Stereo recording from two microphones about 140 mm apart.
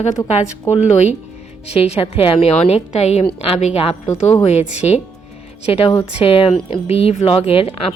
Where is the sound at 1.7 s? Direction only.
45° left (ahead or behind).